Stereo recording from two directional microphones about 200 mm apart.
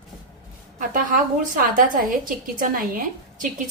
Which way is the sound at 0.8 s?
40° right (ahead or behind).